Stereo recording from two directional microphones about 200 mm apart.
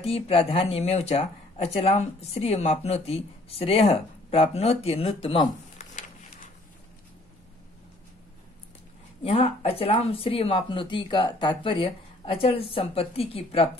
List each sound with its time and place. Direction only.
0.0 s speech: 30° left (ahead or behind)
9.2 s speech: 30° left (ahead or behind)